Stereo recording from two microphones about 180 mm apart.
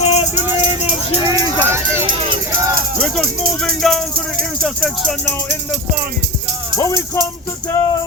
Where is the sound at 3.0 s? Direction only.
5° left (ahead or behind).